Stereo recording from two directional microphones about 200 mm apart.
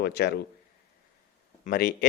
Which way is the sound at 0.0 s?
55° left (ahead or behind).